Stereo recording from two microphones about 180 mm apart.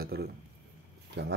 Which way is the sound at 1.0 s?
65° right (ahead or behind).